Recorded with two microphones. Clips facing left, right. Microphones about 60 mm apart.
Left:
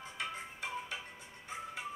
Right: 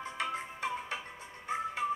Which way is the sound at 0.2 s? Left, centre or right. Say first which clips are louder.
Right 5 dB; right.